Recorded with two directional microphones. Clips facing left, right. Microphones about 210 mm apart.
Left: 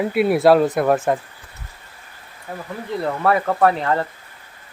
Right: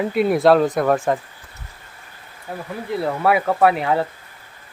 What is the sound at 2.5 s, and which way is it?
Speech, 5° right (ahead or behind).